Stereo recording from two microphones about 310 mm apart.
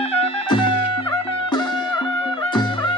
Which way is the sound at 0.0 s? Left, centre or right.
Centre.